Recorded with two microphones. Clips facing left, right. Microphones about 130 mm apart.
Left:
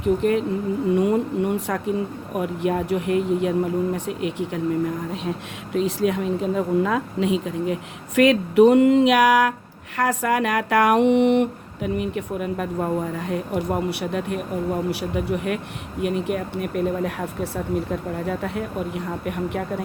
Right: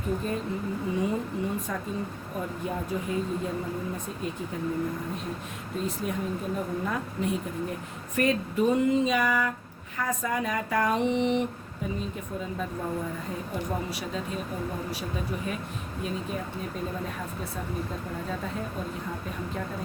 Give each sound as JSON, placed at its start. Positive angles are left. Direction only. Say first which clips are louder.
{"t": 0.0, "sound": "speech", "louder": "left 10 dB", "side_deg": 75}
{"t": 0.9, "sound": "speech", "louder": "left 8 dB", "side_deg": 65}
{"t": 5.7, "sound": "a woman's voice", "louder": "left 10 dB", "side_deg": 90}
{"t": 14.0, "sound": "speech", "louder": "left 7 dB", "side_deg": 65}